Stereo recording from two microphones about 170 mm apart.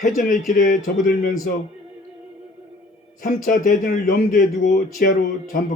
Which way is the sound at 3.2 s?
50° left (ahead or behind).